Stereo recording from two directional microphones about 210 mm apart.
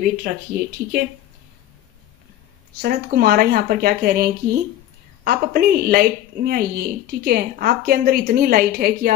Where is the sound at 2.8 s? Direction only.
45° right (ahead or behind).